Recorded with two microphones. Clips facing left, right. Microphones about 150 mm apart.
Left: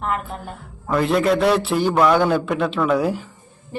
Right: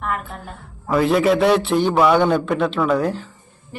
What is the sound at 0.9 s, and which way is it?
A man's voice, centre (ahead or behind).